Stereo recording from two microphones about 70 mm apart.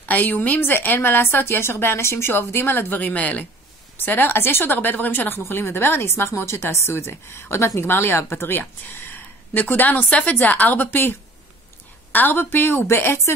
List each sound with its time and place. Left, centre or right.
0.1 s a woman's voice: left